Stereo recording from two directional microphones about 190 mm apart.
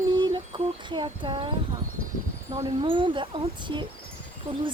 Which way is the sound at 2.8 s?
25° right (ahead or behind).